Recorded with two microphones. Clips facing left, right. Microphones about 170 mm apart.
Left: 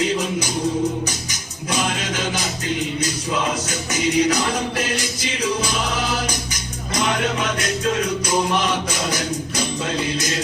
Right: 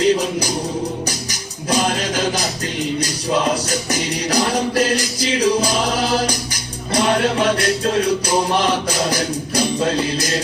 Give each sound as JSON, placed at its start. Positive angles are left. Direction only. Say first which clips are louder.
{"t": 0.0, "sound": "music", "louder": "right 5 dB", "side_deg": -35}